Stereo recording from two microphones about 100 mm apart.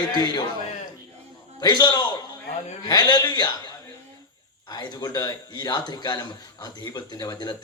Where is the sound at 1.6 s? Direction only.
45° left (ahead or behind).